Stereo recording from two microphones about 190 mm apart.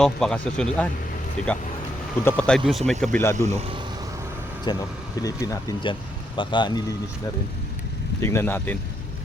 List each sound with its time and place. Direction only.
0.0 s speech: 5° left (ahead or behind)
3.4 s speech: 15° left (ahead or behind)
4.6 s speech: 20° left (ahead or behind)
8.2 s speech: 15° left (ahead or behind)